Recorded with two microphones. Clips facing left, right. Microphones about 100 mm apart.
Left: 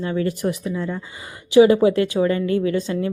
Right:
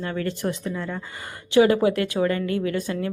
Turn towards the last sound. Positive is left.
turn(degrees=25)  # may be behind; listen again after turning